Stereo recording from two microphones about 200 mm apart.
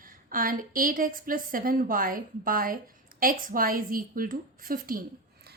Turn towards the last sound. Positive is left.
turn(degrees=-45)  # may be behind; listen again after turning